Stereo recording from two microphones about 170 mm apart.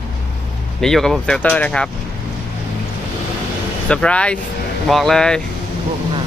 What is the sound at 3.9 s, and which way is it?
Speech, 5° left (ahead or behind).